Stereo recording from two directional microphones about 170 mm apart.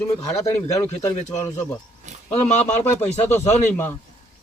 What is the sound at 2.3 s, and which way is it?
Speech, 40° left (ahead or behind).